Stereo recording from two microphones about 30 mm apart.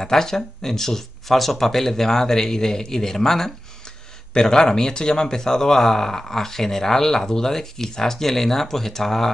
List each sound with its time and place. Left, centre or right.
0.0 s a man's voice: centre